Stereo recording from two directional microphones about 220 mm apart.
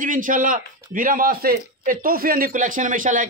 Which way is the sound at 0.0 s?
35° right (ahead or behind).